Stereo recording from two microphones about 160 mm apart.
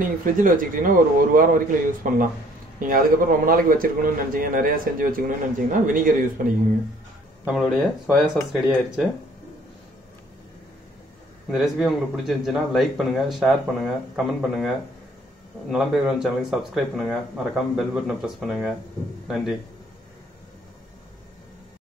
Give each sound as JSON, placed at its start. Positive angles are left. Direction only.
{"t": 0.0, "sound": "a man's voice", "side_deg": -60}
{"t": 7.4, "sound": "speech", "side_deg": 0}
{"t": 11.5, "sound": "speech", "side_deg": 0}
{"t": 15.7, "sound": "speech", "side_deg": -5}